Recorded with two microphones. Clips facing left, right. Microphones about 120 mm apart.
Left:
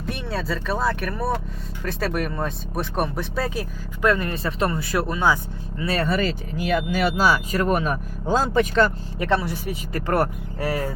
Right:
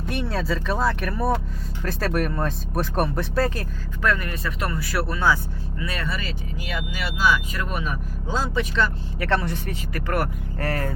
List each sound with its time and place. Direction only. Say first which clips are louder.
0.0 s speech: right 1 dB; centre (ahead or behind)
4.0 s speech: left 3 dB; 25° left (ahead or behind)
5.8 s speech: left 7 dB; 35° left (ahead or behind)
6.1 s speech: left 7 dB; 50° left (ahead or behind)
9.1 s speech: left 1 dB; 20° left (ahead or behind)
9.4 s speech: left 1 dB; 5° left (ahead or behind)
9.9 s speech: left 4 dB; 30° left (ahead or behind)
10.6 s speech: left 2 dB; 10° left (ahead or behind)